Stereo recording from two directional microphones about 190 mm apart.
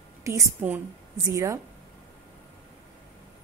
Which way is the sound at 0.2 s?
10° right (ahead or behind).